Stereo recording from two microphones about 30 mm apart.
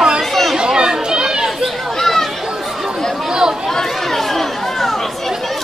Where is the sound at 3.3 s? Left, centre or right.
Right.